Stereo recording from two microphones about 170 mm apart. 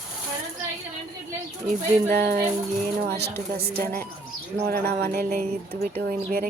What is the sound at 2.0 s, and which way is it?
Speech, 60° right (ahead or behind).